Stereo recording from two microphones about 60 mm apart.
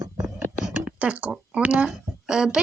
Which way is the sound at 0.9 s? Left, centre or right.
Right.